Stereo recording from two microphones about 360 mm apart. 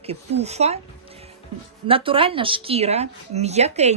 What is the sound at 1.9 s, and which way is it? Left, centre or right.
Speech, centre.